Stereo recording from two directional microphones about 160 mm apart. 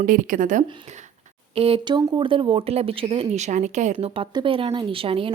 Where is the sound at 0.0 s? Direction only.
55° right (ahead or behind).